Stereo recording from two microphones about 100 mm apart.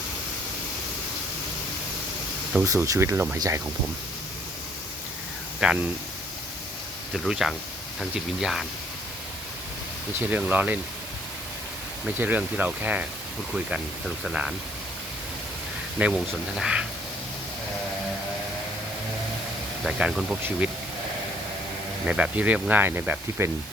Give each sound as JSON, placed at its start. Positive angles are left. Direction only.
{"t": 2.6, "sound": "speech", "side_deg": -35}
{"t": 5.6, "sound": "speech", "side_deg": -5}
{"t": 7.1, "sound": "speech", "side_deg": 0}
{"t": 10.2, "sound": "speech", "side_deg": -15}
{"t": 12.0, "sound": "speech", "side_deg": -15}
{"t": 16.0, "sound": "speech", "side_deg": -10}
{"t": 19.8, "sound": "speech", "side_deg": -5}
{"t": 22.0, "sound": "speech", "side_deg": -10}